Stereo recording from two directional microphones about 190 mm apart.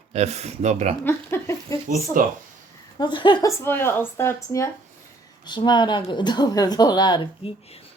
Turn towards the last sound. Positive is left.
turn(degrees=25)  # may be behind; listen again after turning